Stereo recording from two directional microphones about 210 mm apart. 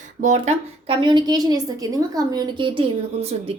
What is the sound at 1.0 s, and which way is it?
A woman's voice, 20° right (ahead or behind).